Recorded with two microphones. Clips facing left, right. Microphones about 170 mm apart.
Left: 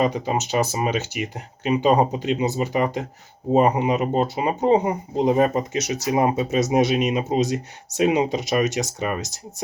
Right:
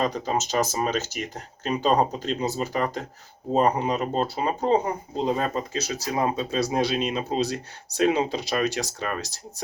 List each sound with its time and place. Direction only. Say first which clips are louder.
0.5 s speech: left 3 dB; 10° left (ahead or behind)